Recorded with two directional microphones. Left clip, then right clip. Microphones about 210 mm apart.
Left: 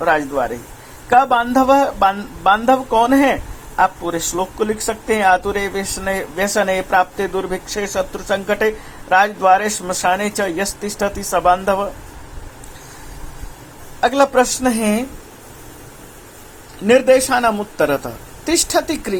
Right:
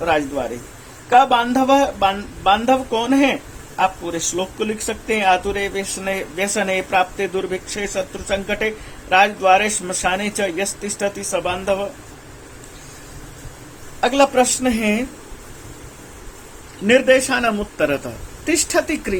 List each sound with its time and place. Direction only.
0.0 s a woman's voice: 20° left (ahead or behind)
14.0 s speech: 20° left (ahead or behind)
16.8 s a woman's voice: 15° left (ahead or behind)